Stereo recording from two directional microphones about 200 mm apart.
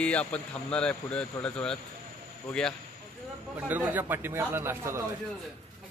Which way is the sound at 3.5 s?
10° right (ahead or behind).